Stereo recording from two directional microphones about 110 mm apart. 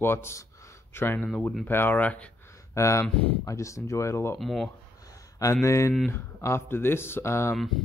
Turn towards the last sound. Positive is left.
turn(degrees=25)  # may be behind; listen again after turning